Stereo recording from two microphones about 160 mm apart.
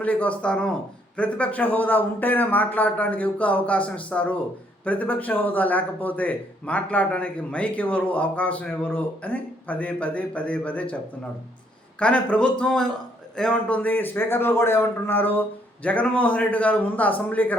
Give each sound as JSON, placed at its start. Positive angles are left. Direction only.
{"t": 0.0, "sound": "a man's voice", "side_deg": 10}
{"t": 11.9, "sound": "a man's voice", "side_deg": 5}